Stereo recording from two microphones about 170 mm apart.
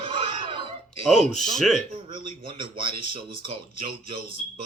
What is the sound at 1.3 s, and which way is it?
Speech, centre (ahead or behind).